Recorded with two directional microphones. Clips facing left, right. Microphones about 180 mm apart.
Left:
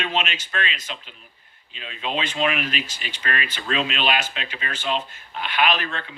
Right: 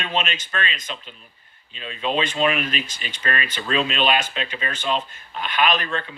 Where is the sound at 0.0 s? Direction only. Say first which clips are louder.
Even; 50° right (ahead or behind).